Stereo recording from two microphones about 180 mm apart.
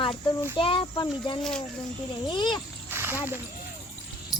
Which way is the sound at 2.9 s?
15° right (ahead or behind).